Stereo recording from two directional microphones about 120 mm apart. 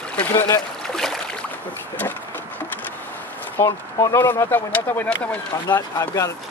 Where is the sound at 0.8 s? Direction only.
5° left (ahead or behind).